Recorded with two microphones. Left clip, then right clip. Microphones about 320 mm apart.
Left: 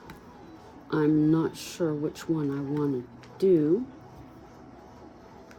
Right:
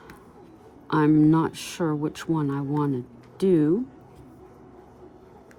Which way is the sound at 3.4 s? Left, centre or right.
Right.